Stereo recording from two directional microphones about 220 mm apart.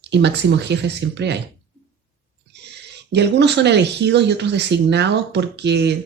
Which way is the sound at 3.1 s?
50° right (ahead or behind).